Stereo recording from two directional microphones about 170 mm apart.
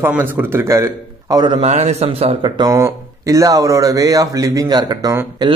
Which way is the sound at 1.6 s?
40° right (ahead or behind).